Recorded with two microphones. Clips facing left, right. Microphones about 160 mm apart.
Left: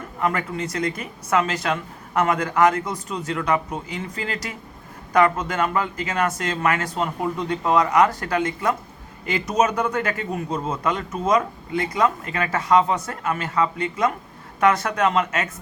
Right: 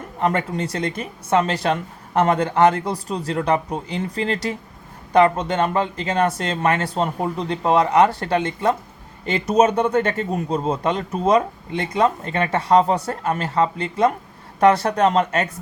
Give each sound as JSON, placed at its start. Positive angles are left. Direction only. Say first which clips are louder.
{"t": 0.2, "sound": "a man's voice", "louder": "right 3 dB", "side_deg": -35}